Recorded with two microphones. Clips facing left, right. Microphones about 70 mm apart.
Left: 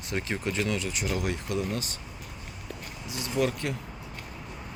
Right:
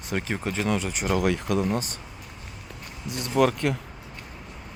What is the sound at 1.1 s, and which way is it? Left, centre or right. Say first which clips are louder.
Speech: right 7 dB; right.